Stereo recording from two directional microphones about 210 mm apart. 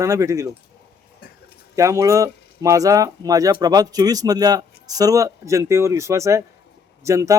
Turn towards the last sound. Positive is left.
turn(degrees=-15)  # may be behind; listen again after turning